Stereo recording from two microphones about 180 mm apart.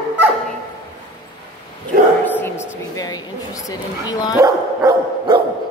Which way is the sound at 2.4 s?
15° left (ahead or behind).